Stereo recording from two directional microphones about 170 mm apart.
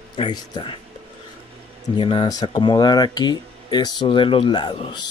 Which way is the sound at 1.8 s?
30° left (ahead or behind).